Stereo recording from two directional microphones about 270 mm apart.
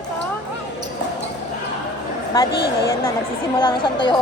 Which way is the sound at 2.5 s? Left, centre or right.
Left.